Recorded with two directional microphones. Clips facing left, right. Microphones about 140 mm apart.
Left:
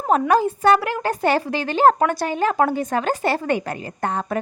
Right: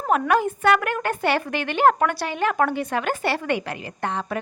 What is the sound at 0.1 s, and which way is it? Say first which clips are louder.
A woman's voice: left 3 dB; 35° left (ahead or behind).